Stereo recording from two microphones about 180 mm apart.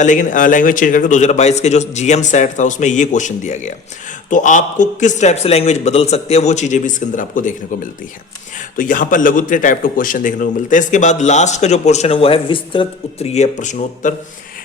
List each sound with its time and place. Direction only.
0.0 s a man's voice: 45° left (ahead or behind)
8.8 s a man's voice: 45° left (ahead or behind)